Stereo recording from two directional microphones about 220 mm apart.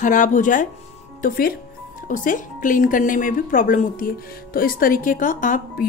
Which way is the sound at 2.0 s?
35° left (ahead or behind).